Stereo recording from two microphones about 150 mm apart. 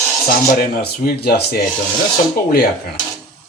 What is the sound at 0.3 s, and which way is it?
Speech, 80° left.